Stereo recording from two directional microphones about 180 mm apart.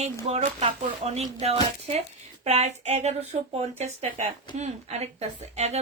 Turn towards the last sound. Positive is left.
turn(degrees=-35)  # may be behind; listen again after turning